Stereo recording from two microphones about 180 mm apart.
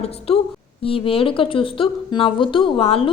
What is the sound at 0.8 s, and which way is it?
Speech, 30° left (ahead or behind).